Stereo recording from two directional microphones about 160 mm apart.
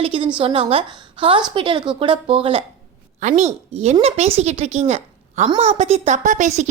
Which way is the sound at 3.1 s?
45° right (ahead or behind).